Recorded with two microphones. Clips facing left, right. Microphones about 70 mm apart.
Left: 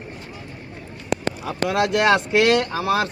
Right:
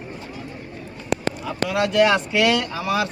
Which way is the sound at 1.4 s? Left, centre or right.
Left.